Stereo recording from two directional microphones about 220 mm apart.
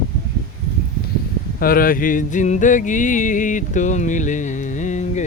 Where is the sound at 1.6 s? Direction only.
40° left (ahead or behind).